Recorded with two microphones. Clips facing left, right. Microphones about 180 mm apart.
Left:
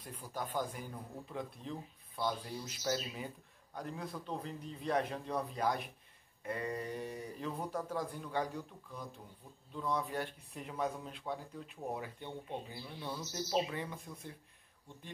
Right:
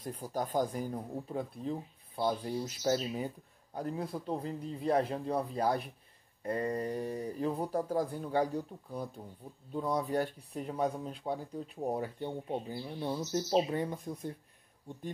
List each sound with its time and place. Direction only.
0.0 s speech: 40° right (ahead or behind)